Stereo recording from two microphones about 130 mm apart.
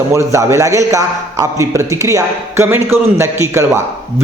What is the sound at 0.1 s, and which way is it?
A man's voice, 20° right (ahead or behind).